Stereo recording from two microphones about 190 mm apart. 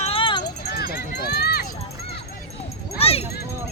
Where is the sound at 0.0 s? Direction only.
30° left (ahead or behind).